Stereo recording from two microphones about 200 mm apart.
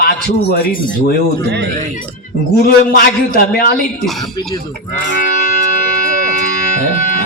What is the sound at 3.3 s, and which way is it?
Speech, 50° left (ahead or behind).